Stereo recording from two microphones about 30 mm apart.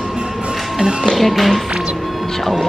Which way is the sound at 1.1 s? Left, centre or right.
Centre.